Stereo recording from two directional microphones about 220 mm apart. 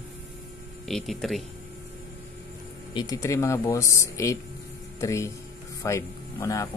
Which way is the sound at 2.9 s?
15° left (ahead or behind).